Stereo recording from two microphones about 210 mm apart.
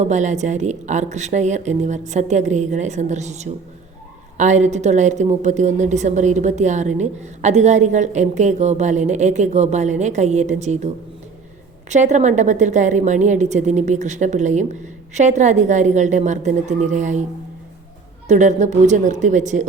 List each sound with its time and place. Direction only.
0.0 s a woman's voice: 35° right (ahead or behind)
18.3 s a woman's voice: 35° right (ahead or behind)